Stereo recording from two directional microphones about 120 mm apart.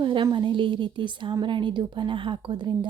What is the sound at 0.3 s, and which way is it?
Speech, 45° right (ahead or behind).